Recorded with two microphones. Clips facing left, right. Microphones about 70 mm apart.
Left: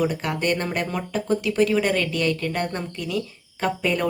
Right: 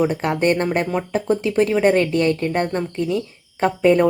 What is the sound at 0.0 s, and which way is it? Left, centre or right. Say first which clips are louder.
A woman's voice: right 5 dB; right.